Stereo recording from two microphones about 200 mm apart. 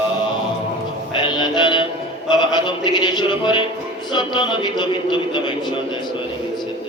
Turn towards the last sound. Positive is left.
turn(degrees=25)  # may be behind; listen again after turning